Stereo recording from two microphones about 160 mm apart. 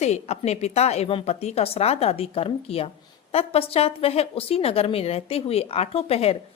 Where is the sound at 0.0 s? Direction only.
45° left (ahead or behind).